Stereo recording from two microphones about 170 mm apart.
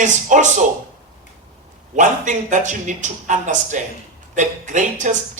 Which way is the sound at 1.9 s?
45° right (ahead or behind).